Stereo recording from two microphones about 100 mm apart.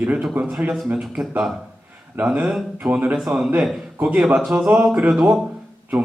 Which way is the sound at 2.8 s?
15° right (ahead or behind).